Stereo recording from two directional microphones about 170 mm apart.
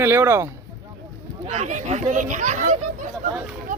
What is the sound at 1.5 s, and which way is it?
Speech, 45° right (ahead or behind).